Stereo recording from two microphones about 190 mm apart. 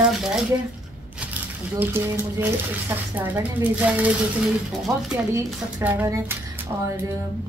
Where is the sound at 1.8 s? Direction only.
10° right (ahead or behind).